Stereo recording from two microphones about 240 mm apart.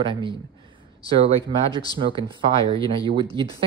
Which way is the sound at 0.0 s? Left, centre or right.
Right.